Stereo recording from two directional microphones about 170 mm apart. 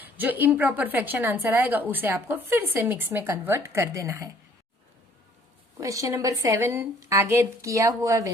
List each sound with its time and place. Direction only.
0.0 s a woman's voice: 10° right (ahead or behind)
5.8 s a woman's voice: 20° right (ahead or behind)